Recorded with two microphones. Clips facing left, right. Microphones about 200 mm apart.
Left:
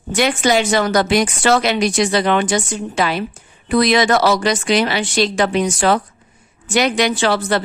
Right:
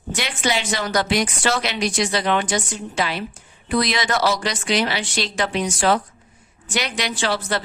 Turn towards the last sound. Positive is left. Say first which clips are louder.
# left 6 dB
turn(degrees=65)  # may be behind; listen again after turning